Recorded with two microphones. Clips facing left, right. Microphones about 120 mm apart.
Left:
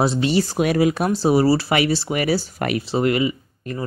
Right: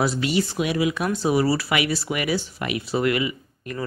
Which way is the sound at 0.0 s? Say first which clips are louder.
Left 4 dB; 30° left (ahead or behind).